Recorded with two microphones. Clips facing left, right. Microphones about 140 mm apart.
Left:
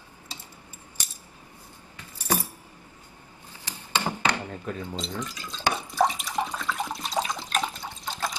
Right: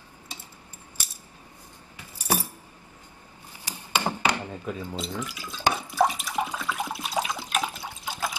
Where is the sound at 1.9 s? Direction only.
10° right (ahead or behind).